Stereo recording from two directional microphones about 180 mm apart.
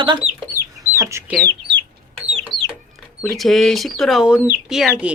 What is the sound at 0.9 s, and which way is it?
Speech, 15° right (ahead or behind).